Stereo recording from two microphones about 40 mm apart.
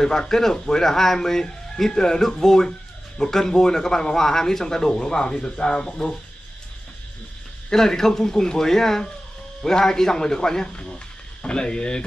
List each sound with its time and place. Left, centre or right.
0.0 s a man's voice: centre
7.7 s a man's voice: centre